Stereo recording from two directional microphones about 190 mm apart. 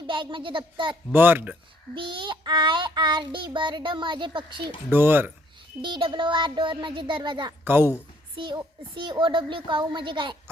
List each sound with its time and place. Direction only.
0.1 s child singing: 25° right (ahead or behind)
1.1 s speech: 10° right (ahead or behind)
2.0 s child singing: 25° right (ahead or behind)
4.9 s speech: 10° right (ahead or behind)
5.8 s child singing: 25° right (ahead or behind)
7.6 s a woman's voice: 10° right (ahead or behind)
8.4 s child singing: 25° right (ahead or behind)